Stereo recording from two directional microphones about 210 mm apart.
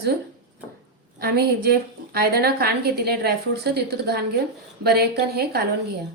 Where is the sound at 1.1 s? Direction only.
45° right (ahead or behind).